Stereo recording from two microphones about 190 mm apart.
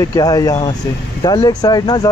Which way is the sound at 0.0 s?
20° left (ahead or behind).